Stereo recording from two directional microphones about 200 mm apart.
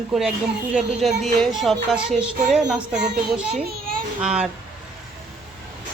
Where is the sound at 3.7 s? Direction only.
45° right (ahead or behind).